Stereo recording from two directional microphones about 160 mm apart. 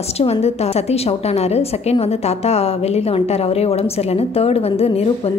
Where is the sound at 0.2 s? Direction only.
40° left (ahead or behind).